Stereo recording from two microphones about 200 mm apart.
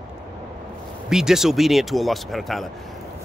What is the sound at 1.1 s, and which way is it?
Speech, centre (ahead or behind).